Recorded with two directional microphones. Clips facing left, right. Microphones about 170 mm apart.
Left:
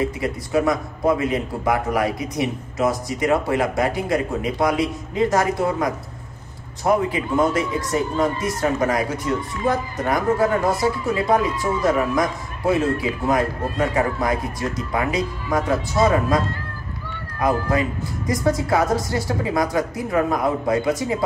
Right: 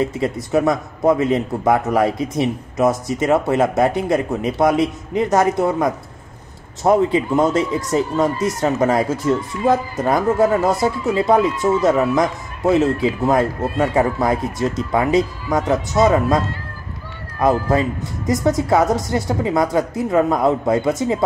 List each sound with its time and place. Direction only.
0.2 s a man's voice: 20° right (ahead or behind)
17.4 s a man's voice: 25° right (ahead or behind)